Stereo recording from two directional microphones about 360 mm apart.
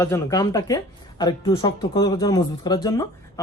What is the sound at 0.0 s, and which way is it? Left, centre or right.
A man's voice, centre.